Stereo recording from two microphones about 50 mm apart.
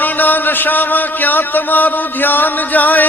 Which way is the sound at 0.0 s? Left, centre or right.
Left.